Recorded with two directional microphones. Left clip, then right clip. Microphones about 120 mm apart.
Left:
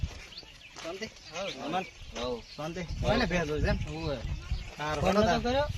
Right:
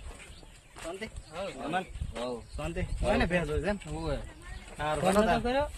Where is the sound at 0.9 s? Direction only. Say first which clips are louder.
Left 1 dB; 5° left (ahead or behind).